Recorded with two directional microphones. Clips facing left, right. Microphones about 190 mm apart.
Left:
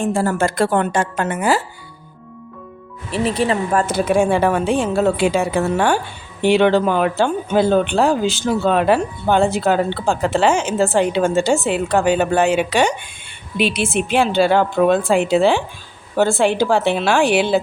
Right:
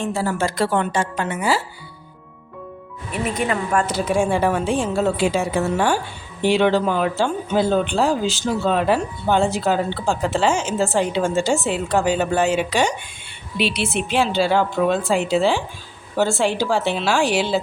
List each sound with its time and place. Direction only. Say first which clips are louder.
0.0 s a woman's voice: left 4 dB; 50° left (ahead or behind)
3.1 s speech: left 4 dB; 30° left (ahead or behind)
3.8 s speech: left 4 dB; 55° left (ahead or behind)
13.6 s speech: left 3 dB; 50° left (ahead or behind)